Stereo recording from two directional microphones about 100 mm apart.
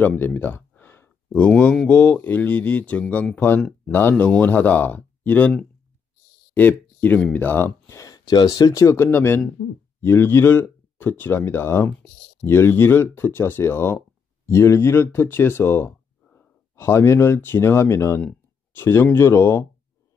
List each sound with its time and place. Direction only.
0.0 s a sound: 15° left (ahead or behind)
1.4 s speech: 10° left (ahead or behind)
6.5 s speech: 15° left (ahead or behind)